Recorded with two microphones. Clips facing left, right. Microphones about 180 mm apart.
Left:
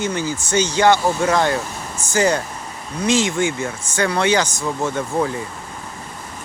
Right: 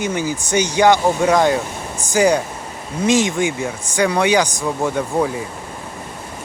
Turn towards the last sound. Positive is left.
turn(degrees=-15)  # may be behind; listen again after turning